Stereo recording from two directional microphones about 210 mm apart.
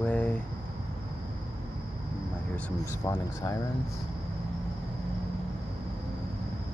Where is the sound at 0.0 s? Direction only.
5° left (ahead or behind).